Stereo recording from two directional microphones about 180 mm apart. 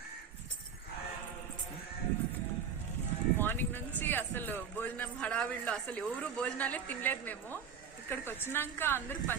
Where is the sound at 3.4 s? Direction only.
10° left (ahead or behind).